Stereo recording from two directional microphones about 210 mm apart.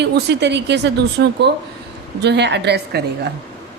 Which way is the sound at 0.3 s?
55° right (ahead or behind).